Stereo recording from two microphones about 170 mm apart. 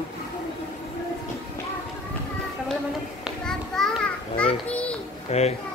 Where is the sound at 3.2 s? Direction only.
5° left (ahead or behind).